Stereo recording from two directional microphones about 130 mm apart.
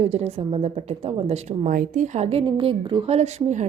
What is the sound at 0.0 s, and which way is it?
A woman's voice, 55° right (ahead or behind).